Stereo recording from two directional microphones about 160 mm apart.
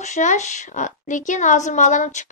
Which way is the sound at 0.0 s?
50° left (ahead or behind).